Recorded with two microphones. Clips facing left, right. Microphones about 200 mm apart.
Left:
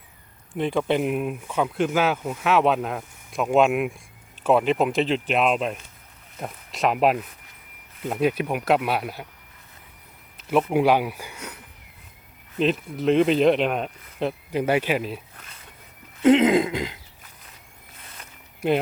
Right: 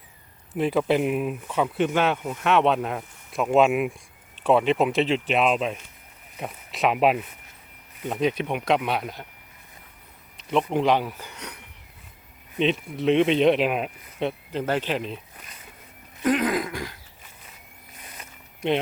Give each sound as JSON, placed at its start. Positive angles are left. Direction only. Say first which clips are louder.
{"t": 0.5, "sound": "speech", "louder": "right 1 dB", "side_deg": -5}
{"t": 10.3, "sound": "speech", "louder": "left 3 dB", "side_deg": 5}
{"t": 14.5, "sound": "speech", "louder": "left 6 dB", "side_deg": 10}
{"t": 16.2, "sound": "throat clearing", "louder": "left 7 dB", "side_deg": 25}
{"t": 18.0, "sound": "a sound", "louder": "right 2 dB", "side_deg": -10}
{"t": 18.6, "sound": "speech", "louder": "left 2 dB", "side_deg": 5}